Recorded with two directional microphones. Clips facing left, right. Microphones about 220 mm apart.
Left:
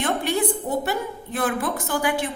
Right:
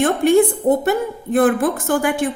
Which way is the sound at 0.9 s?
50° right (ahead or behind).